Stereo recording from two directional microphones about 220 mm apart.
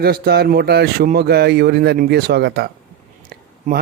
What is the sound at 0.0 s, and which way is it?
Speech, 45° right (ahead or behind).